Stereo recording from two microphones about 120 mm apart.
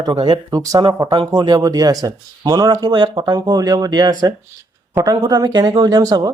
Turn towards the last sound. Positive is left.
turn(degrees=-30)  # may be behind; listen again after turning